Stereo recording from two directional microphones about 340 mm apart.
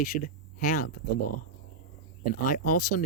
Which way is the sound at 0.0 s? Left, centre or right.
Left.